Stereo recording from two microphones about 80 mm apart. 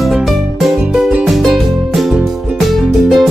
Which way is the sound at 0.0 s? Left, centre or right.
Centre.